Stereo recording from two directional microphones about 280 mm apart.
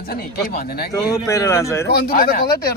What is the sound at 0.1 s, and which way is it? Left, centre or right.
Speech, left.